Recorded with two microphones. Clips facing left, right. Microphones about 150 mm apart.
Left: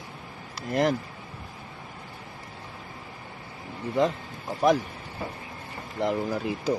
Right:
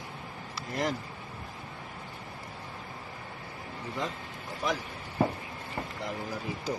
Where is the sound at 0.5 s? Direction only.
60° left (ahead or behind).